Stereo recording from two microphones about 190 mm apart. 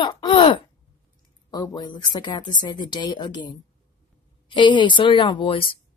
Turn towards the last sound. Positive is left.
turn(degrees=25)  # may be behind; listen again after turning